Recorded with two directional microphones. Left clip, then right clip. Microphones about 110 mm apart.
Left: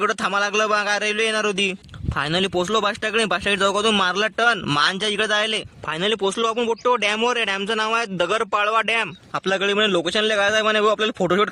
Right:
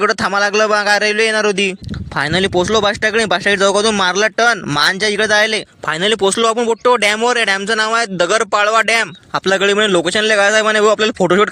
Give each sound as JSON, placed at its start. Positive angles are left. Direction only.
{"t": 0.0, "sound": "speech", "side_deg": -35}
{"t": 2.6, "sound": "speech", "side_deg": -30}